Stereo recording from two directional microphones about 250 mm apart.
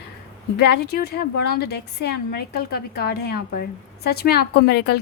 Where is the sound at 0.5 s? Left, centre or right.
Left.